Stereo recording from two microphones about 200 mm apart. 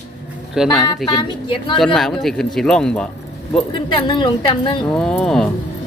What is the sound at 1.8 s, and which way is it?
Speech, centre (ahead or behind).